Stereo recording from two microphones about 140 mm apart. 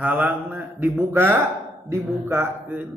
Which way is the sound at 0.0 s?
10° right (ahead or behind).